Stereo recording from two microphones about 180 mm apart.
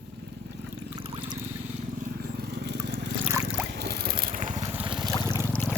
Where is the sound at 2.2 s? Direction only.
65° right (ahead or behind); by 4.6 s 45° right (ahead or behind).